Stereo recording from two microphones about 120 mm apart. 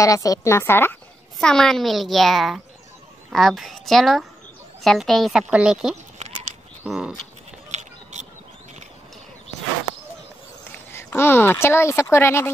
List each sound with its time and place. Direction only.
0.0 s speech: 30° left (ahead or behind)
1.4 s a woman's voice: 5° left (ahead or behind)
7.7 s scissors: 75° right (ahead or behind)
10.9 s speech: 20° left (ahead or behind)